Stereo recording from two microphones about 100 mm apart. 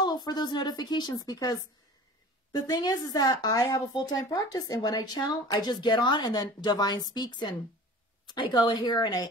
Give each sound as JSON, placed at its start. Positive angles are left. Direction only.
{"t": 0.0, "sound": "speech", "side_deg": 45}